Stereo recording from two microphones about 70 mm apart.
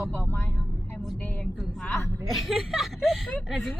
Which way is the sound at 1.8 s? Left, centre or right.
Centre.